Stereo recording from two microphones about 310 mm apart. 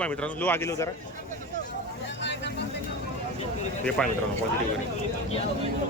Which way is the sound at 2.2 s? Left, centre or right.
Left.